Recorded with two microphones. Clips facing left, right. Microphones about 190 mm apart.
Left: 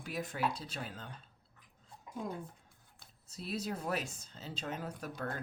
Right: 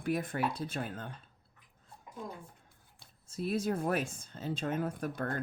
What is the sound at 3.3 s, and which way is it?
Speech, 50° right (ahead or behind).